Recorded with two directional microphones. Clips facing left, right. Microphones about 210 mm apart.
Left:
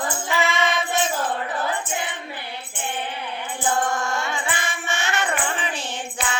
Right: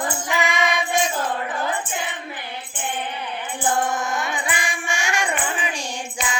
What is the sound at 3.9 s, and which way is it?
Music, 20° right (ahead or behind).